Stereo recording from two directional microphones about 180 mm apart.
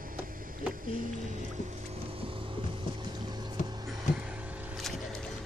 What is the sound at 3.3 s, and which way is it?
Boat, 25° right (ahead or behind).